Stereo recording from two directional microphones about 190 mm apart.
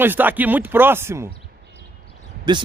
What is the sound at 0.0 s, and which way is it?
Speech, 10° right (ahead or behind).